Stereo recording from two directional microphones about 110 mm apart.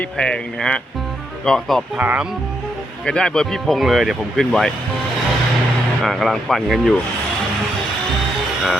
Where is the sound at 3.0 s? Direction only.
10° left (ahead or behind).